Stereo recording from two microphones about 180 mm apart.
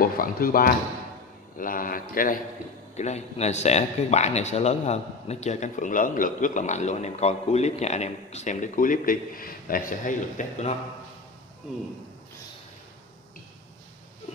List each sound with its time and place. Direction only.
0.0 s a man's voice: 55° left (ahead or behind)
3.0 s a man's voice: 40° left (ahead or behind)